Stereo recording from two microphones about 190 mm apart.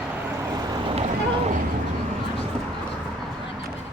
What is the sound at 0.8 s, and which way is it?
Vehicle, 30° right (ahead or behind).